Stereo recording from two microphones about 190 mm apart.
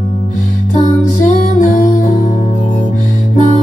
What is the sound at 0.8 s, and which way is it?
Music, 40° left (ahead or behind).